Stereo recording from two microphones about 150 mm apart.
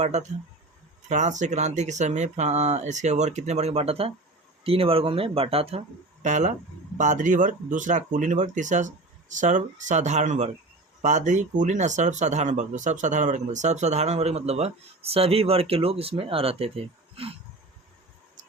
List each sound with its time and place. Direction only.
0.0 s speech: 50° right (ahead or behind)
6.2 s speech: 55° right (ahead or behind)